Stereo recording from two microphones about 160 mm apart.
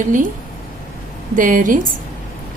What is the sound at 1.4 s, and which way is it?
Speech, 55° right (ahead or behind).